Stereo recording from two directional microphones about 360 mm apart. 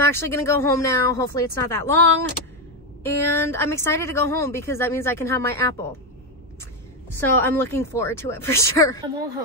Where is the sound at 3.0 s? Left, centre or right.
Centre.